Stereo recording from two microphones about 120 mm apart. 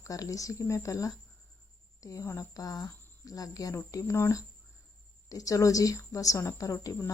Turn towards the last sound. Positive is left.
turn(degrees=25)  # may be behind; listen again after turning